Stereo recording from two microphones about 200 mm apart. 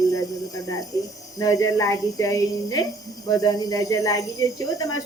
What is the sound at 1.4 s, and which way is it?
Speech, 15° left (ahead or behind).